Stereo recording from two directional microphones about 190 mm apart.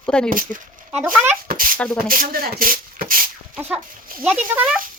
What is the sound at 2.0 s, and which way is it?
Speech, 45° right (ahead or behind).